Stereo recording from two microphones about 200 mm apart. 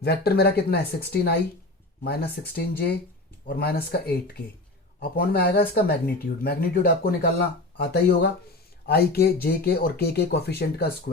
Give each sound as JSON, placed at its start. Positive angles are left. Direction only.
{"t": 0.0, "sound": "speech", "side_deg": 55}